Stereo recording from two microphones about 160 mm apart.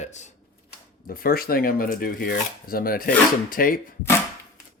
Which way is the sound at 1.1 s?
65° left (ahead or behind).